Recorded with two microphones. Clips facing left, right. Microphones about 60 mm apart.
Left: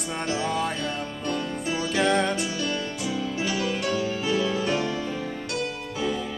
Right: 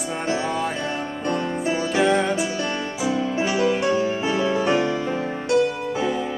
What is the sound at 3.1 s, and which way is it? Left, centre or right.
Music, right.